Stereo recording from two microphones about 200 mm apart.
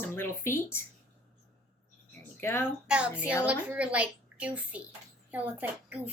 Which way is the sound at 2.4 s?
10° left (ahead or behind).